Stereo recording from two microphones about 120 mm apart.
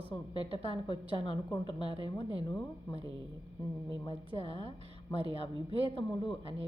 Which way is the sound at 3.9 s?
40° left (ahead or behind).